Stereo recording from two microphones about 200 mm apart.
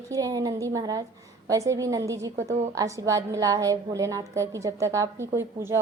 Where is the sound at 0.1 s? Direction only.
15° right (ahead or behind).